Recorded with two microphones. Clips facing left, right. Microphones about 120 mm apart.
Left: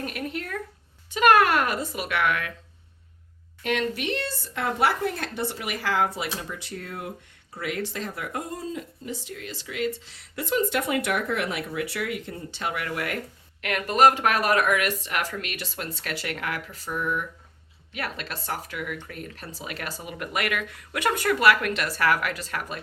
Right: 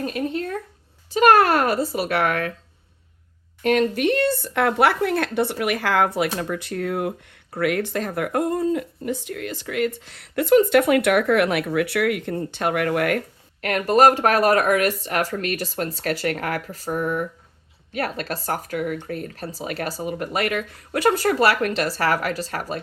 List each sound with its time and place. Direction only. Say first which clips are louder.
0.0 s a sound: right 7 dB; 30° right (ahead or behind)
1.1 s speech: right 4 dB; 35° right (ahead or behind)
3.6 s speech: right 8 dB; 45° right (ahead or behind)
13.6 s speech: right 4 dB; 40° right (ahead or behind)